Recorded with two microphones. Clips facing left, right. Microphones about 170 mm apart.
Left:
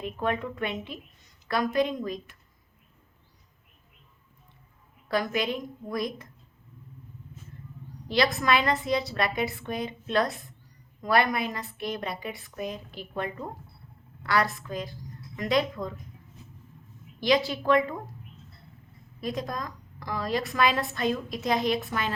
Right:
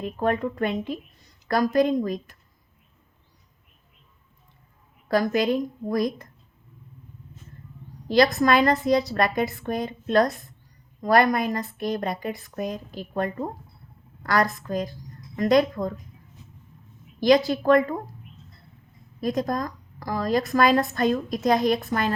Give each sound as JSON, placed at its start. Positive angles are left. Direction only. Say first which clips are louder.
{"t": 0.2, "sound": "a woman's voice", "louder": "right 6 dB", "side_deg": -40}
{"t": 5.0, "sound": "a woman's voice", "louder": "right 6 dB", "side_deg": -40}
{"t": 8.0, "sound": "a woman's voice", "louder": "right 6 dB", "side_deg": -45}
{"t": 17.2, "sound": "a woman's voice", "louder": "right 6 dB", "side_deg": -45}
{"t": 19.2, "sound": "a woman's voice", "louder": "right 7 dB", "side_deg": -45}